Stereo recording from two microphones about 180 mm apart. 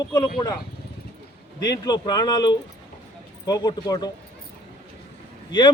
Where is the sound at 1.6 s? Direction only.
20° left (ahead or behind).